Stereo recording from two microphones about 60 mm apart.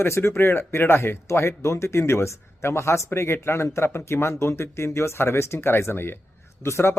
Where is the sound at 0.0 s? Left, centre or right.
Left.